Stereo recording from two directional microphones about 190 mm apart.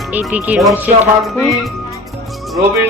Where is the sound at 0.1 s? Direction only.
10° right (ahead or behind).